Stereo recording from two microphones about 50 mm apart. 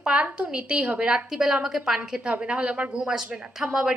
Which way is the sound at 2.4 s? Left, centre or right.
Right.